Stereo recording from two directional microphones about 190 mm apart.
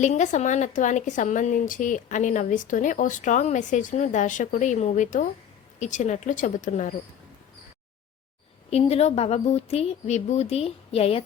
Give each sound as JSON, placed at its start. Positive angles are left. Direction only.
{"t": 0.0, "sound": "speech", "side_deg": 40}
{"t": 8.7, "sound": "speech", "side_deg": 35}